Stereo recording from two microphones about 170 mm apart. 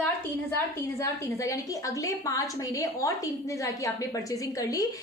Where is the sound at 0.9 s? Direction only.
20° left (ahead or behind).